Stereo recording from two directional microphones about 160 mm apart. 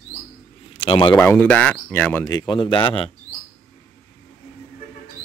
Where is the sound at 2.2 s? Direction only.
30° left (ahead or behind).